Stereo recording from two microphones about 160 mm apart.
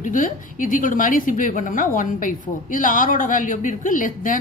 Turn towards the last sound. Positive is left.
turn(degrees=55)  # may be behind; listen again after turning